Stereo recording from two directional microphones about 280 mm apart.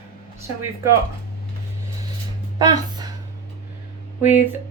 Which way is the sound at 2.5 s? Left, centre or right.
Centre.